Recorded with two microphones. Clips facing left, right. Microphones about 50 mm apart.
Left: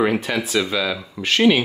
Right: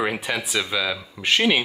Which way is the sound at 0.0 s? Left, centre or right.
Centre.